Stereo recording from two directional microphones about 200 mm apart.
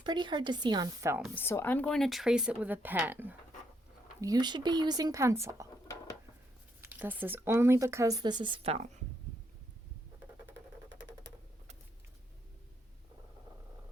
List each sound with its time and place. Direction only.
0.0 s a woman's voice: 25° right (ahead or behind)
1.4 s speech: 10° left (ahead or behind); by 3.3 s 10° right (ahead or behind)
4.2 s speech: 20° right (ahead or behind)
6.8 s speech: 10° right (ahead or behind); by 8.9 s 30° right (ahead or behind)